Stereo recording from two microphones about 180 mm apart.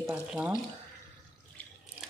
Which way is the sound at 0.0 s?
5° right (ahead or behind).